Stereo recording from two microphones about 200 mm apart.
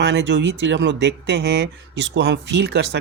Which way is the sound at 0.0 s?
60° right (ahead or behind).